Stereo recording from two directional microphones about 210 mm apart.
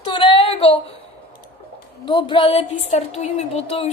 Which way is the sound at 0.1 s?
25° left (ahead or behind).